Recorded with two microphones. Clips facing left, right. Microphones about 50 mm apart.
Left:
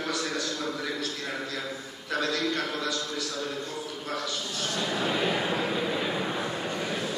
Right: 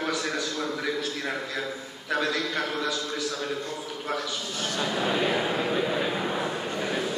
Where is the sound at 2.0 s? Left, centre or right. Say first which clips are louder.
Right 1 dB; centre.